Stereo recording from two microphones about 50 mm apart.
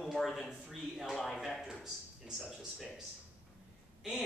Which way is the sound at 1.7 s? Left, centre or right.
Centre.